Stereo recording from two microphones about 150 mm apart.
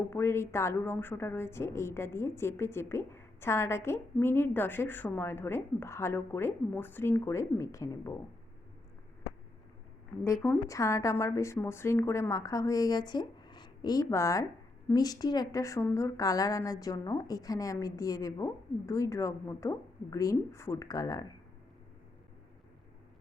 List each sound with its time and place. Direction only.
0.1 s a woman's voice: 15° left (ahead or behind)
10.2 s a woman's voice: 20° left (ahead or behind)